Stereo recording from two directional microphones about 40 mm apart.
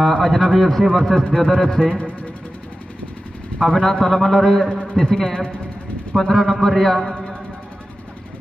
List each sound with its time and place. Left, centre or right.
0.0 s a man's voice: centre
3.6 s a man's voice: centre
4.6 s a man's voice: left
5.0 s a man's voice: centre